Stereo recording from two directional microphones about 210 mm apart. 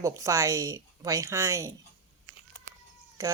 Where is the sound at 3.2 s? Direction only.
15° right (ahead or behind).